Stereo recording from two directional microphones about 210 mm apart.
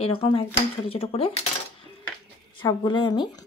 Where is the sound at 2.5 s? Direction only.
20° left (ahead or behind).